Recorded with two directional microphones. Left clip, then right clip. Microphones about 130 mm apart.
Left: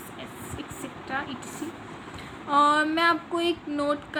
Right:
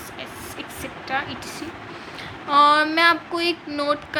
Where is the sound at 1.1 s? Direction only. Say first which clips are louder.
Right 6 dB; 40° left (ahead or behind).